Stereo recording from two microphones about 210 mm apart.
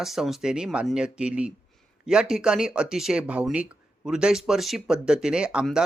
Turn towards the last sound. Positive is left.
turn(degrees=-5)  # may be behind; listen again after turning